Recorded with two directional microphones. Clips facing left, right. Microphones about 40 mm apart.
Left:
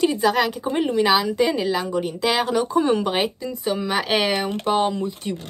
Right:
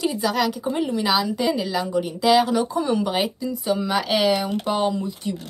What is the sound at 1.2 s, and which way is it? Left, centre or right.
Speech, centre.